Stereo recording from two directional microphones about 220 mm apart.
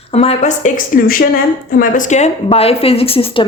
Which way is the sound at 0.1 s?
30° left (ahead or behind).